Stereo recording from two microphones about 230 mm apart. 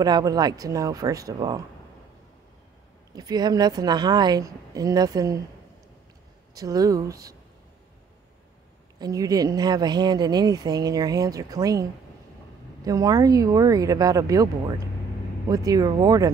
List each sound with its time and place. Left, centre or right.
0.0 s speech: centre
3.1 s speech: centre
6.5 s speech: centre
9.0 s speech: centre